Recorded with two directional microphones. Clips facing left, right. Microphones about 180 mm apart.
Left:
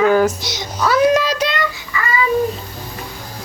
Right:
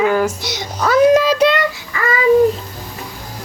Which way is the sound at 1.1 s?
50° right (ahead or behind).